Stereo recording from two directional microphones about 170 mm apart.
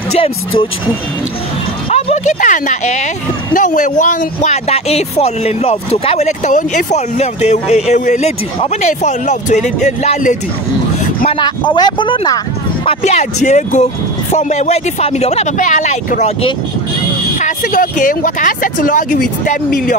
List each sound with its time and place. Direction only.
0.1 s speech: 30° left (ahead or behind)
1.9 s speech: 35° left (ahead or behind)
11.2 s speech: 30° left (ahead or behind)
12.8 s speech: 40° left (ahead or behind)